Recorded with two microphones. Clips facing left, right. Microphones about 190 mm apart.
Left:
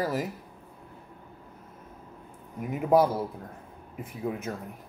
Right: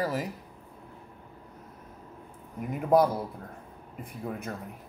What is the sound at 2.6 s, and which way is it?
Speech, 5° left (ahead or behind).